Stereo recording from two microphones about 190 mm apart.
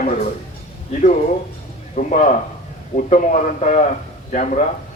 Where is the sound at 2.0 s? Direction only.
45° left (ahead or behind).